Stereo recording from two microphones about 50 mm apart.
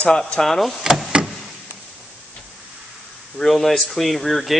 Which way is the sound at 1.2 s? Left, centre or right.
Centre.